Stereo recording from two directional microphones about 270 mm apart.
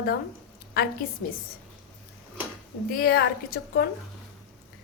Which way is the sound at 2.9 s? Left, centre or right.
Left.